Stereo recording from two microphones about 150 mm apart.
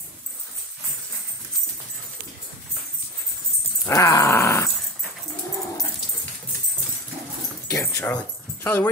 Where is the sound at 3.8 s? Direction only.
20° left (ahead or behind).